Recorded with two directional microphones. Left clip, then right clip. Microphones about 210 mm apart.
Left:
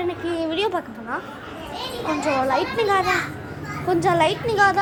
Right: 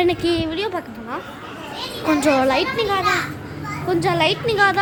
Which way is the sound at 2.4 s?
20° right (ahead or behind).